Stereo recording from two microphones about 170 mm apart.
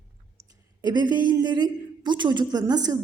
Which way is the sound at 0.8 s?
25° right (ahead or behind).